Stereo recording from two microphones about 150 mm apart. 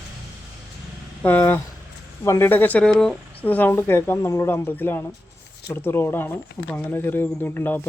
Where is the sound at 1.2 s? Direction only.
10° left (ahead or behind).